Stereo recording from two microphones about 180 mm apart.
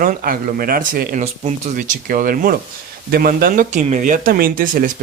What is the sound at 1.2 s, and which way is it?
Speech, 40° right (ahead or behind).